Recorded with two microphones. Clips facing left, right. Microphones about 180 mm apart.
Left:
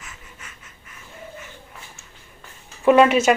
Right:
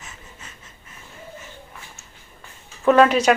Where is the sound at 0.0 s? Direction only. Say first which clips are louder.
Right 1 dB; 30° right (ahead or behind).